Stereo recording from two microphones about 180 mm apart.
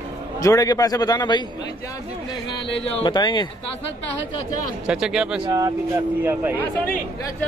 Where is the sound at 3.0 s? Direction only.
25° left (ahead or behind).